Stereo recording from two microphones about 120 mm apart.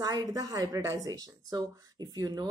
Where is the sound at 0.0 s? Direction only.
30° right (ahead or behind).